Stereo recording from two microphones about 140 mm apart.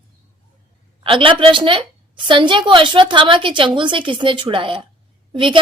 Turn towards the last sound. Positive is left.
turn(degrees=-40)  # may be behind; listen again after turning